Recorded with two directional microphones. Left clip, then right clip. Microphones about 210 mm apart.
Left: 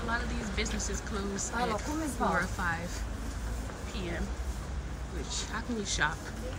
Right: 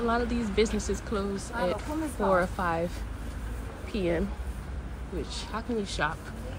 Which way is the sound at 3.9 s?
20° right (ahead or behind).